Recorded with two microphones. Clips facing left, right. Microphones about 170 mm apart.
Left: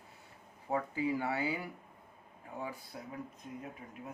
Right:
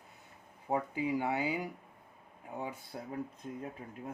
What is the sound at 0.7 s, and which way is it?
Speech, 15° right (ahead or behind).